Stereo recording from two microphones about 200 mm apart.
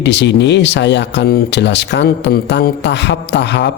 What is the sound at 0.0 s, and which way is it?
Speech, 60° left (ahead or behind).